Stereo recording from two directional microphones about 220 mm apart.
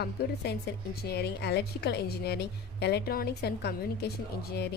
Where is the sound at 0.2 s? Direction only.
45° left (ahead or behind).